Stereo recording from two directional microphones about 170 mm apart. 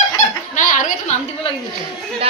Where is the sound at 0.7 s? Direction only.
50° left (ahead or behind).